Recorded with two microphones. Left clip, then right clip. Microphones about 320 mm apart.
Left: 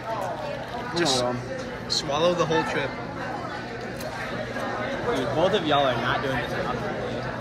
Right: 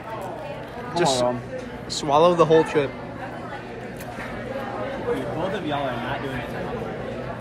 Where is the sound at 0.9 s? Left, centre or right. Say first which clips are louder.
Right 3 dB; centre.